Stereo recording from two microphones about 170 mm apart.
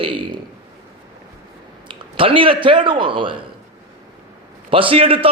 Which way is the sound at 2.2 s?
30° right (ahead or behind).